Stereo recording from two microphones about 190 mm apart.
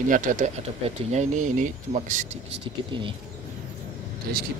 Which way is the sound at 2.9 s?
25° right (ahead or behind).